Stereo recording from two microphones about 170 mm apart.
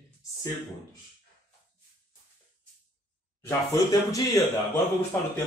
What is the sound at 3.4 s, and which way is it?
Speech, 20° left (ahead or behind).